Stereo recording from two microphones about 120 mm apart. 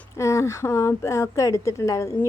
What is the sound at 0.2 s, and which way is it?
A woman's voice, 25° left (ahead or behind).